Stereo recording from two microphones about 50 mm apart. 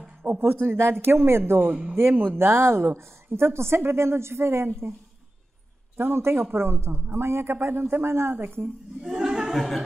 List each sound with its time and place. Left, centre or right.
0.2 s speech: right
1.7 s speech: right
2.3 s a woman's voice: right
5.9 s speech: right
9.0 s a sound: centre
9.5 s a sound: centre